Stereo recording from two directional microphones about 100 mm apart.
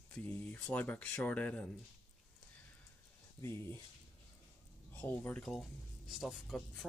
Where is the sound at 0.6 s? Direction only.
15° left (ahead or behind).